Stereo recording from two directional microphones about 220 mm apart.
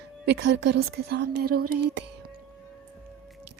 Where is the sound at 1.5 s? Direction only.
90° right.